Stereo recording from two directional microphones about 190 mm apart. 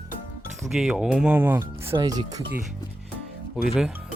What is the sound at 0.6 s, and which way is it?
Speech, centre (ahead or behind).